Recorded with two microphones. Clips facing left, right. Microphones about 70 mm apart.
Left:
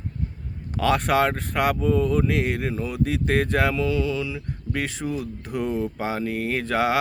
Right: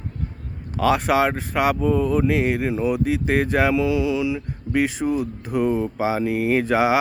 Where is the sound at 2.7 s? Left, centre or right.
Centre.